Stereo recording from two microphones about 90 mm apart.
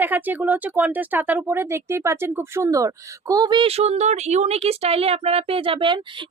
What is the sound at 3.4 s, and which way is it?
Speech, 60° right (ahead or behind).